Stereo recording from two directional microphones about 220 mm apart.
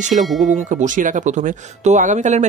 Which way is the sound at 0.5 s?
35° right (ahead or behind).